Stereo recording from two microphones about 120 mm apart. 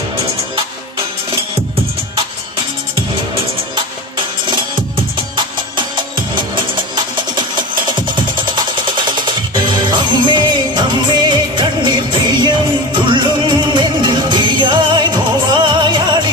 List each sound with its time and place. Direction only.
6.3 s music: 40° right (ahead or behind)